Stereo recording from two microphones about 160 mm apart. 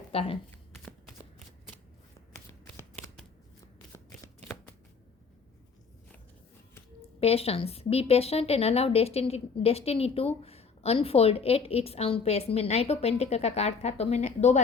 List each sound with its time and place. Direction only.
0.1 s speech: 35° left (ahead or behind)
7.2 s speech: 40° left (ahead or behind)